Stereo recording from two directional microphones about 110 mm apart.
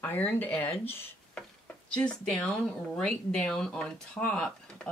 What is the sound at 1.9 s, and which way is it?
Speech, 10° left (ahead or behind).